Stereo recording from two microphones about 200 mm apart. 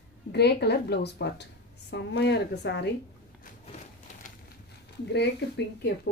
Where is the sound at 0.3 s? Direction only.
55° left (ahead or behind).